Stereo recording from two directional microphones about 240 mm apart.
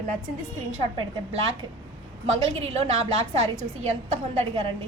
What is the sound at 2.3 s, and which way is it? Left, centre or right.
A woman's voice, right.